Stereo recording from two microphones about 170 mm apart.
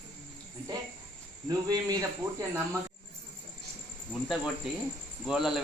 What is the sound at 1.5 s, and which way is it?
Cricket, 25° right (ahead or behind).